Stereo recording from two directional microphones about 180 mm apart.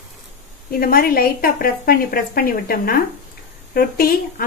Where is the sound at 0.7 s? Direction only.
55° left (ahead or behind).